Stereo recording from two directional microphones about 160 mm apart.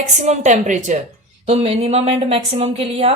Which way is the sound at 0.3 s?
45° right (ahead or behind).